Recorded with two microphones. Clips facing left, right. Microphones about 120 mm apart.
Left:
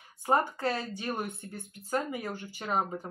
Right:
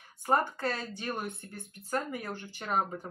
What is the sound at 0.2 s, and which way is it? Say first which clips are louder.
Speech: left 1 dB; 15° left (ahead or behind).